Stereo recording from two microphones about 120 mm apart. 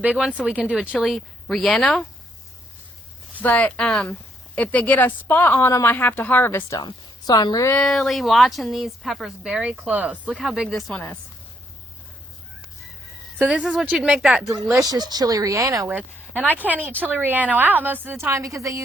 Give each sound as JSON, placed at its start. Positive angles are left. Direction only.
{"t": 0.0, "sound": "a woman's voice", "side_deg": -5}
{"t": 3.4, "sound": "a woman's voice", "side_deg": 10}
{"t": 6.7, "sound": "a woman's voice", "side_deg": 35}
{"t": 7.8, "sound": "a woman's voice", "side_deg": 5}
{"t": 13.4, "sound": "a woman's voice", "side_deg": -5}
{"t": 14.8, "sound": "speech", "side_deg": -35}
{"t": 15.9, "sound": "a woman's voice", "side_deg": -15}